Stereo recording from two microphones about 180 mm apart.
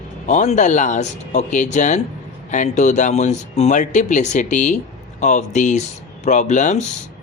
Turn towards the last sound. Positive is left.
turn(degrees=40)  # may be behind; listen again after turning